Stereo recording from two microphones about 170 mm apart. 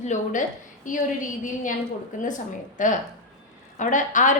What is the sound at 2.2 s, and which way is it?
A woman's voice, 50° left (ahead or behind).